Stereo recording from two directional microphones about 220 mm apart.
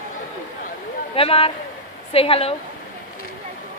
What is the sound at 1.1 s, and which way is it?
A woman's voice, 25° left (ahead or behind).